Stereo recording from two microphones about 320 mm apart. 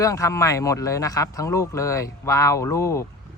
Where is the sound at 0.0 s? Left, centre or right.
Centre.